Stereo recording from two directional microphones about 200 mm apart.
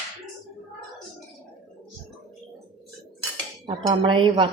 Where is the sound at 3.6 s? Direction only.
20° right (ahead or behind).